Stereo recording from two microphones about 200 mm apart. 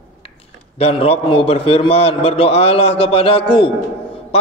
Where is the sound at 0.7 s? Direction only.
30° left (ahead or behind).